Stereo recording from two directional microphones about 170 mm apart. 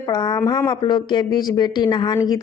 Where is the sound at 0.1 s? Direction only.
25° left (ahead or behind).